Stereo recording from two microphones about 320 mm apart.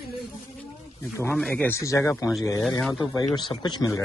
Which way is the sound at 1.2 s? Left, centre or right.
Centre.